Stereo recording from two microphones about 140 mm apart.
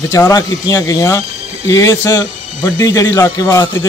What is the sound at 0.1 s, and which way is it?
Speech, 25° left (ahead or behind).